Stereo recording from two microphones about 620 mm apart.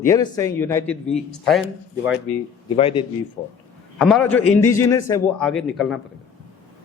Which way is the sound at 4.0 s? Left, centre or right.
Centre.